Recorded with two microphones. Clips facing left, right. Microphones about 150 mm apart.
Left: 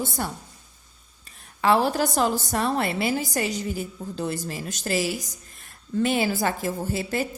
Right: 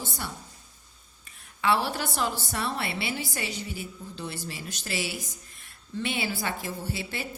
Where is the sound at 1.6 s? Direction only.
40° left (ahead or behind).